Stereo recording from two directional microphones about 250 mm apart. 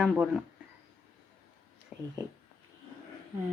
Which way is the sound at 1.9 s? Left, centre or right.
Centre.